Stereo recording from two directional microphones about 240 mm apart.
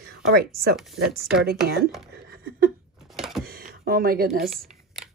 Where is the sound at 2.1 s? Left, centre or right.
Right.